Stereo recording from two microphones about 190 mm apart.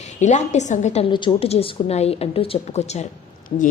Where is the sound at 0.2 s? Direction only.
35° left (ahead or behind).